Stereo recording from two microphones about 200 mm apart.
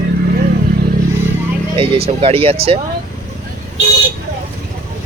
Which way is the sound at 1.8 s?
30° right (ahead or behind).